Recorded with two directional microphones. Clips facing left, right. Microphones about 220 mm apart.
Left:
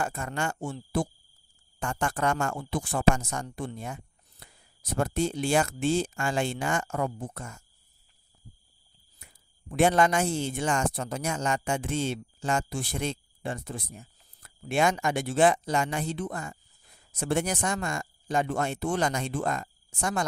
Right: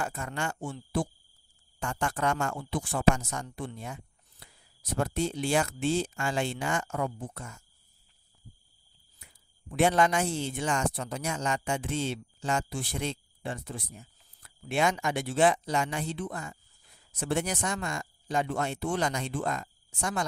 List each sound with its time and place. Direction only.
0.0 s speech: 45° left (ahead or behind)
9.2 s speech: 45° left (ahead or behind)